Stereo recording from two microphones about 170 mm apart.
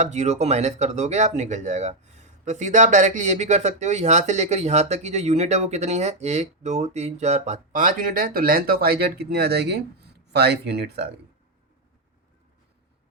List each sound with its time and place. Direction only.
0.0 s speech: 40° right (ahead or behind); by 11.0 s 70° right (ahead or behind)